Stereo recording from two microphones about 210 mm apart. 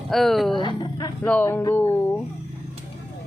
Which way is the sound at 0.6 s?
20° left (ahead or behind).